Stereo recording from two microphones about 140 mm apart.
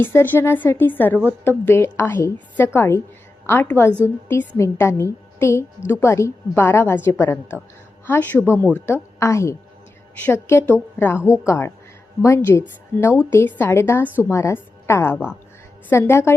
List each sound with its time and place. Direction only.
0.0 s a woman's voice: 15° left (ahead or behind)